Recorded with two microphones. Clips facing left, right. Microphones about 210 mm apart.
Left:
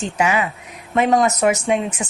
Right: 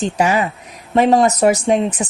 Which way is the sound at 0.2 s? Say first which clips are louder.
Right 1 dB; 35° right (ahead or behind).